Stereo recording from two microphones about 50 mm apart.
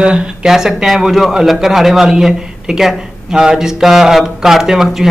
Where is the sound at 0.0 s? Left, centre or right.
Right.